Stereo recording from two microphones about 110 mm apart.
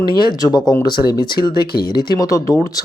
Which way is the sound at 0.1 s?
40° left (ahead or behind).